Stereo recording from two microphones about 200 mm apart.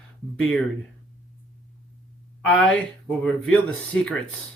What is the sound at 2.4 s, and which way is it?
Speech, 5° left (ahead or behind).